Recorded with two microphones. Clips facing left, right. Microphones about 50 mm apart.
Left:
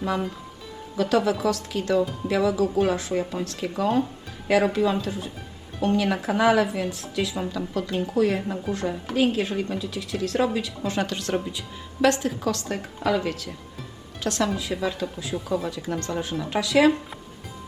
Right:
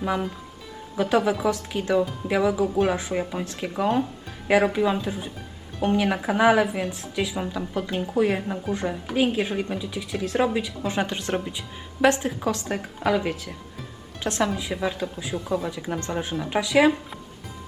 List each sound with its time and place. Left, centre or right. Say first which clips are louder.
1.0 s speech: even; centre